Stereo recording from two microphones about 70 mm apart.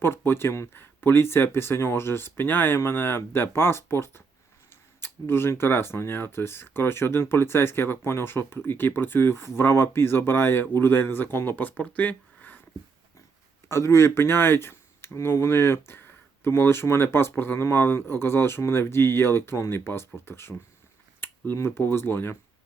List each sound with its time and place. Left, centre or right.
0.0 s speech: left
13.7 s speech: left